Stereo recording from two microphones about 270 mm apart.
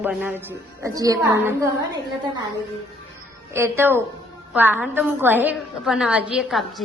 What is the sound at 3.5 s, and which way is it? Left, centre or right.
A woman's voice, centre.